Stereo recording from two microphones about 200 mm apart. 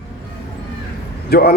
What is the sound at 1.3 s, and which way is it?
Speech, 50° left (ahead or behind).